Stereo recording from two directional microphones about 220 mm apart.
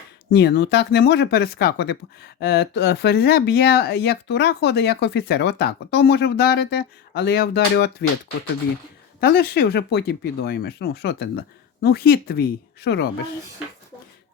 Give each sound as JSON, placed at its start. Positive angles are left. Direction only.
{"t": 0.3, "sound": "speech", "side_deg": 45}
{"t": 9.2, "sound": "speech", "side_deg": 45}